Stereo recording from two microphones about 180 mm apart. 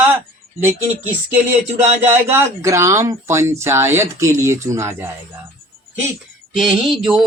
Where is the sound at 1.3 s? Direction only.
10° right (ahead or behind).